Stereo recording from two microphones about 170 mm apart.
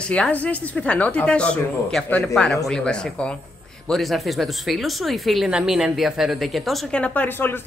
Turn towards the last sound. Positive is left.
turn(degrees=10)  # may be behind; listen again after turning